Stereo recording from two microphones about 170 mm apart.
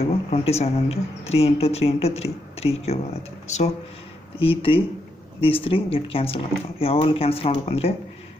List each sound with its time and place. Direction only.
0.0 s speech: 35° left (ahead or behind)